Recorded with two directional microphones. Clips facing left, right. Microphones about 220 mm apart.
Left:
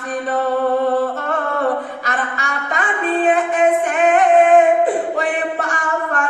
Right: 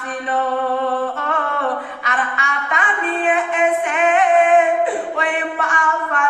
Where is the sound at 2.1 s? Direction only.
40° left (ahead or behind).